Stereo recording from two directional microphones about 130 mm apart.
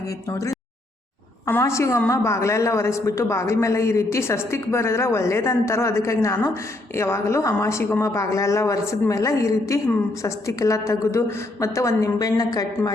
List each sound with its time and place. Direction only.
0.3 s a man's voice: 25° left (ahead or behind)